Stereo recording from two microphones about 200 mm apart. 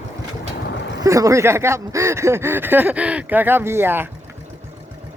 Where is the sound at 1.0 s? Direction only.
15° right (ahead or behind).